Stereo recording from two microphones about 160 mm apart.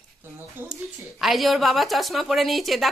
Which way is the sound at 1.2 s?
Centre (ahead or behind).